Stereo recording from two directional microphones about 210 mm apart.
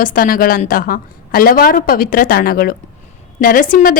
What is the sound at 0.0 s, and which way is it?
A woman's voice, 40° left (ahead or behind).